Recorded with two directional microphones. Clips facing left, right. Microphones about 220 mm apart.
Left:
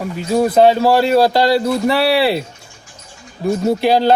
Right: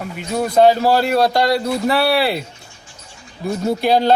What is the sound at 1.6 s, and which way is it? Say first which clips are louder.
Speech: left 2 dB; centre (ahead or behind).